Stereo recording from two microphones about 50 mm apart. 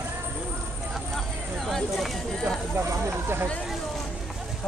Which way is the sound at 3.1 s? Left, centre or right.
Right.